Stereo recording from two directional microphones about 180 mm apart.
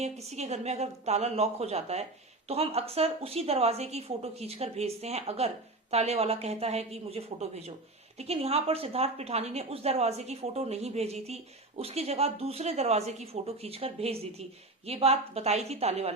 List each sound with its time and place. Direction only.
0.0 s speech: 35° right (ahead or behind)